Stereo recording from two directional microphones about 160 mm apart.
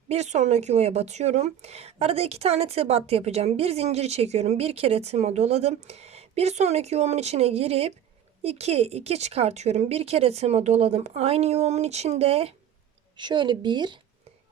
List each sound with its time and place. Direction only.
0.1 s a woman's voice: 45° right (ahead or behind); by 14.0 s 30° right (ahead or behind)